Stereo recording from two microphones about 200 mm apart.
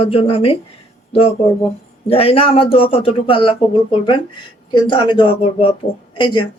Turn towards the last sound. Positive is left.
turn(degrees=25)  # may be behind; listen again after turning